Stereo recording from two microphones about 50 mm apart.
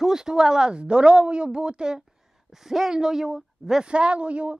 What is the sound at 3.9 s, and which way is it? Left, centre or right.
Speech, right.